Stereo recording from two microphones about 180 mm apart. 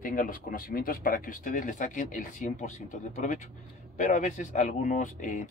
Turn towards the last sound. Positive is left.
turn(degrees=45)  # may be behind; listen again after turning